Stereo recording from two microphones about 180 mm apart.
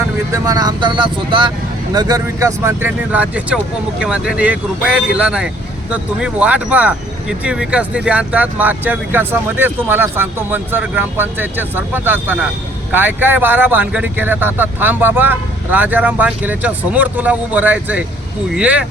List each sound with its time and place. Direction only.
0.0 s speech: 20° right (ahead or behind)